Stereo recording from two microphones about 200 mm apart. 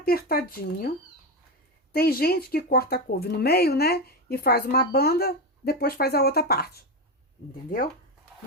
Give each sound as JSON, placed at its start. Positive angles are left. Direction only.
{"t": 0.0, "sound": "speech", "side_deg": 50}
{"t": 1.9, "sound": "speech", "side_deg": 50}